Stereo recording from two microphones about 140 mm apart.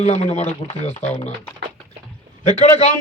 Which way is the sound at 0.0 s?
50° left (ahead or behind).